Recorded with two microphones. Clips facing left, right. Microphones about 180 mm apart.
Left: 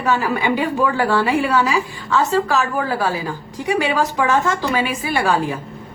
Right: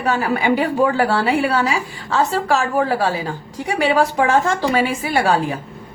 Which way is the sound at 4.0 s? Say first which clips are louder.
Right 2 dB; 30° right (ahead or behind).